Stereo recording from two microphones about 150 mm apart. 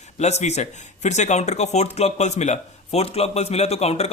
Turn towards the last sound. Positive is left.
turn(degrees=45)  # may be behind; listen again after turning